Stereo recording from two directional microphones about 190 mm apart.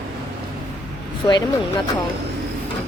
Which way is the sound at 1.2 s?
20° left (ahead or behind).